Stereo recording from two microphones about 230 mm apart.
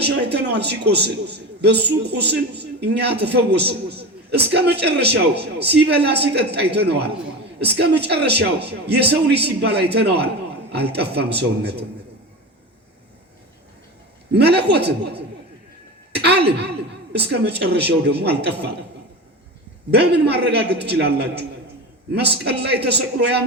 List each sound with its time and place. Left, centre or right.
0.0 s a man's voice: right
14.3 s a man's voice: right
16.1 s a sound: right
16.6 s a man's voice: right
19.9 s a man's voice: right